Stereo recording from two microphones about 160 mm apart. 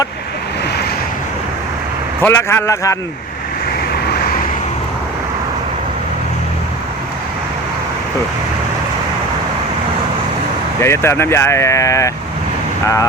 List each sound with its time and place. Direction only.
2.2 s speech: 15° left (ahead or behind)
4.1 s vehicle: 75° left (ahead or behind)
10.8 s speech: 15° left (ahead or behind)